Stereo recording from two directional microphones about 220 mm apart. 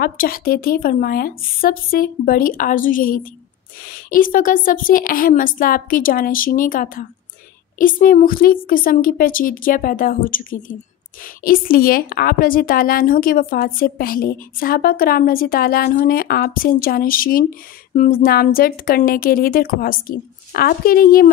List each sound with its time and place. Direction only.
0.0 s a woman's voice: 40° left (ahead or behind)